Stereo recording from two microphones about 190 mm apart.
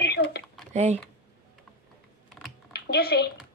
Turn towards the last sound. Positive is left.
turn(degrees=55)  # may be behind; listen again after turning